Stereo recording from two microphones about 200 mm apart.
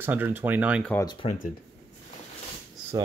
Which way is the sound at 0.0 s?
10° right (ahead or behind).